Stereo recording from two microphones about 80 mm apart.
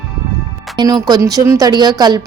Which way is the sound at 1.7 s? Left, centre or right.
Right.